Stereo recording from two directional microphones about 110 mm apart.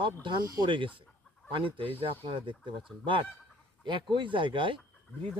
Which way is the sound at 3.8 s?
50° right (ahead or behind).